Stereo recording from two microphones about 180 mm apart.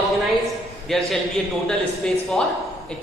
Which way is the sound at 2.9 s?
5° left (ahead or behind).